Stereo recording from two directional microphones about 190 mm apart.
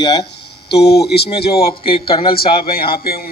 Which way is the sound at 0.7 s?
60° left (ahead or behind).